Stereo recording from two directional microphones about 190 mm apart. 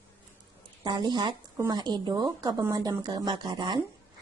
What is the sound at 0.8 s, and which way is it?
Speech, 20° right (ahead or behind).